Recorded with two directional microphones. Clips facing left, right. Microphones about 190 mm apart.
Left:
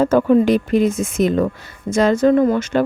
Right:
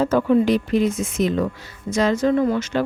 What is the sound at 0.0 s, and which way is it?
Speech, 50° left (ahead or behind).